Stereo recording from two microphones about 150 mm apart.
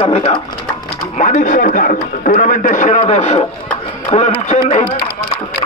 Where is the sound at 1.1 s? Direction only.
55° left (ahead or behind).